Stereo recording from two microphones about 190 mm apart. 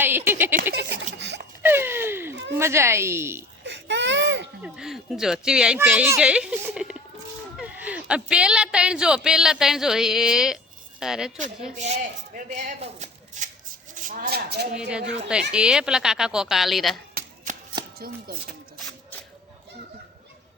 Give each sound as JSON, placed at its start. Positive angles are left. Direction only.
{"t": 0.0, "sound": "speech", "side_deg": -10}
{"t": 1.2, "sound": "a sound", "side_deg": -65}
{"t": 1.6, "sound": "a sound", "side_deg": -10}
{"t": 2.6, "sound": "speech", "side_deg": -15}
{"t": 3.6, "sound": "baby cry", "side_deg": -70}
{"t": 4.6, "sound": "speech", "side_deg": -5}
{"t": 12.5, "sound": "speech", "side_deg": -35}
{"t": 14.8, "sound": "speech", "side_deg": -5}
{"t": 17.2, "sound": "chopping", "side_deg": -40}
{"t": 18.0, "sound": "speech", "side_deg": -50}